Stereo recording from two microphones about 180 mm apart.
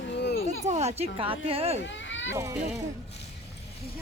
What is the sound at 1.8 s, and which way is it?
Children playing, 85° left.